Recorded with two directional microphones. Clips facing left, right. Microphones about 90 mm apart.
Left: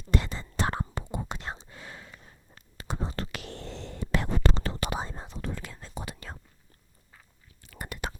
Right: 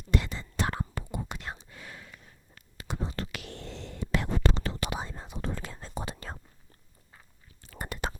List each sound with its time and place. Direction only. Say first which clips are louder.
0.1 s whispering: left 1 dB; 35° left (ahead or behind)
5.4 s whispering: right 2 dB; 35° right (ahead or behind)
7.6 s whispering: right 2 dB; 35° right (ahead or behind)